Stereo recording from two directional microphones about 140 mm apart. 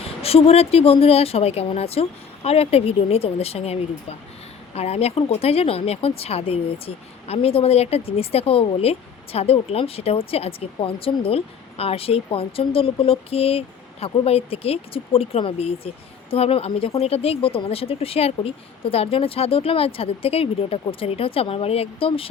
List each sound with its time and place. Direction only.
0.0 s speech: 45° left (ahead or behind)